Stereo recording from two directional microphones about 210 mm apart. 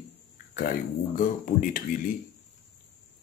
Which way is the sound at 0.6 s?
40° left (ahead or behind).